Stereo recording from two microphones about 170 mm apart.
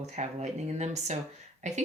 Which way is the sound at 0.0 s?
40° right (ahead or behind).